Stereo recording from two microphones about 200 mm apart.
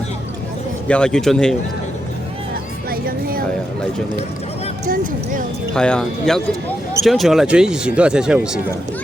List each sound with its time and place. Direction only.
0.9 s speech: 5° left (ahead or behind)
2.9 s a sound: 45° right (ahead or behind)
5.7 s speech: 5° left (ahead or behind)